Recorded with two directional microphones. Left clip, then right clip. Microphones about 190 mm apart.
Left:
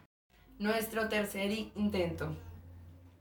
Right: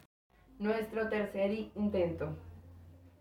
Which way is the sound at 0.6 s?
25° left (ahead or behind).